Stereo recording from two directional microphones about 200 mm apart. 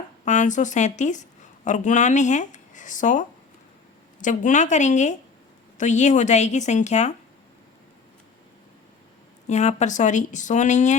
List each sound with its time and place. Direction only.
0.3 s speech: 40° left (ahead or behind)
9.5 s speech: 35° left (ahead or behind)